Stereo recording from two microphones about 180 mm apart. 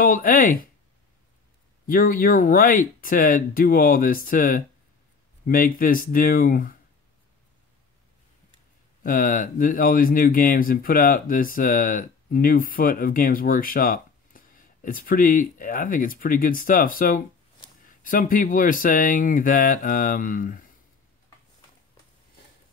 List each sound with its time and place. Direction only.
0.0 s speech: 50° left (ahead or behind)
1.9 s speech: 50° left (ahead or behind)
9.0 s speech: 50° left (ahead or behind)